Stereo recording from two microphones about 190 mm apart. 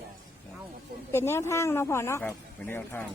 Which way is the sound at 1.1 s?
15° left (ahead or behind).